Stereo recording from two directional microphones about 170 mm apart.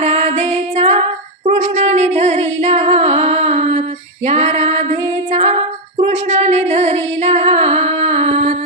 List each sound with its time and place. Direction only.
0.0 s female singing: 40° right (ahead or behind)